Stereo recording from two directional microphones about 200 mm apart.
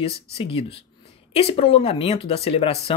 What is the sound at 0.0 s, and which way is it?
A woman's voice, 30° left (ahead or behind).